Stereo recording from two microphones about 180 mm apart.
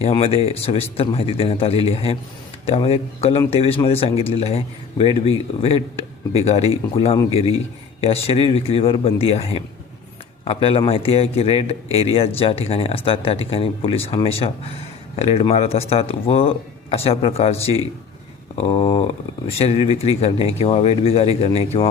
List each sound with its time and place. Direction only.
0.2 s speech: 35° left (ahead or behind)